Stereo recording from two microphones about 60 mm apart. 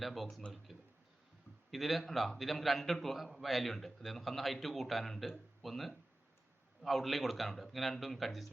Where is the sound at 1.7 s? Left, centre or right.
Centre.